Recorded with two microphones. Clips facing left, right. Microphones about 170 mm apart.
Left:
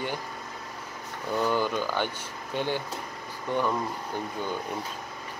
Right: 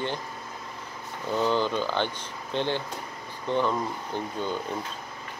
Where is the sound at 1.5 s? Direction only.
10° left (ahead or behind).